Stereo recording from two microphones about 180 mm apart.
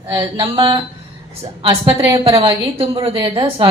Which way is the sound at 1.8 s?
25° right (ahead or behind).